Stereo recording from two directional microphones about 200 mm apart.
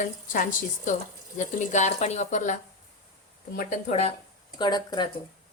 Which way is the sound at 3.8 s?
30° left (ahead or behind).